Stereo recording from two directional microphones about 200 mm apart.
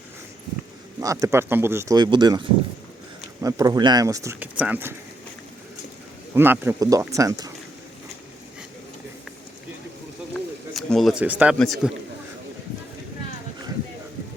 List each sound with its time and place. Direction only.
1.0 s speech: 15° right (ahead or behind)
6.3 s speech: 10° right (ahead or behind)
10.8 s a man's voice: centre (ahead or behind)